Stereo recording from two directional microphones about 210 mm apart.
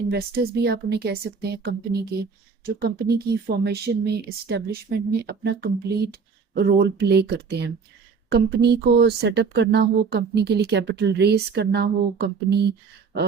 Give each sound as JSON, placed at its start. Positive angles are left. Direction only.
{"t": 0.1, "sound": "speech", "side_deg": -50}